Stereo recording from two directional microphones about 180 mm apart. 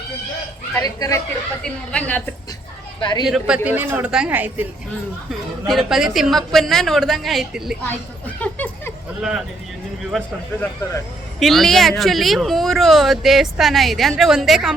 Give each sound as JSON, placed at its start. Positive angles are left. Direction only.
{"t": 0.8, "sound": "speech", "side_deg": 20}
{"t": 1.6, "sound": "a woman's voice", "side_deg": 5}
{"t": 3.0, "sound": "speech", "side_deg": 25}
{"t": 3.2, "sound": "speech", "side_deg": -5}
{"t": 5.3, "sound": "speech", "side_deg": 0}
{"t": 8.4, "sound": "a sound", "side_deg": 10}
{"t": 10.1, "sound": "speech", "side_deg": 5}